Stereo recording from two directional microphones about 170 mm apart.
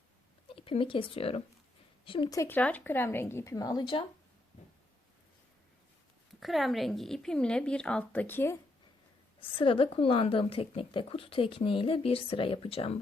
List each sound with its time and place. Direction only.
0.4 s a woman's voice: 30° left (ahead or behind)
2.3 s speech: 15° left (ahead or behind)
6.4 s a woman's voice: centre (ahead or behind)
9.6 s a woman's voice: 30° left (ahead or behind)